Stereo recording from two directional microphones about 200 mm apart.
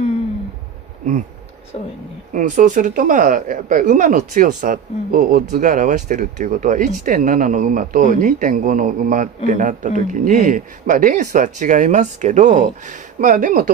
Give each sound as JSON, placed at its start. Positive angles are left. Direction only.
{"t": 2.3, "sound": "speech", "side_deg": -40}